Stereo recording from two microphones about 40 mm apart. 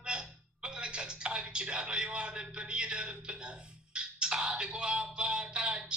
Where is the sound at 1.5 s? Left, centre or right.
Right.